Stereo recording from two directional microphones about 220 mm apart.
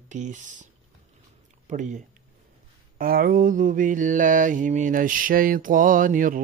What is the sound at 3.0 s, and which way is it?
Mantra, 40° right (ahead or behind).